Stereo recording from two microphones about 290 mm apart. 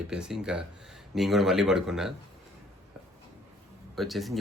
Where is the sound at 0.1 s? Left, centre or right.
Centre.